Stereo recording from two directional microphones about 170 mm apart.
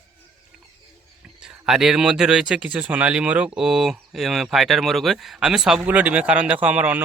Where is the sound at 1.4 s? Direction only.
5° right (ahead or behind).